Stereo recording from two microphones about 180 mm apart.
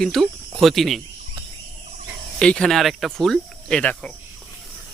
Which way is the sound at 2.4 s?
5° left (ahead or behind).